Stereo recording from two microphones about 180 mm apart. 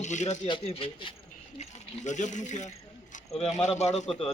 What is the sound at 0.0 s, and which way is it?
Speech, 40° left (ahead or behind).